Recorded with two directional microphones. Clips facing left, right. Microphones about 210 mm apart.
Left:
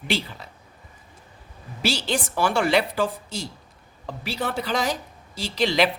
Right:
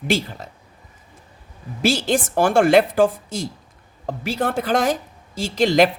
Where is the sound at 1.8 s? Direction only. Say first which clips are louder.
Right 6 dB; 50° right (ahead or behind).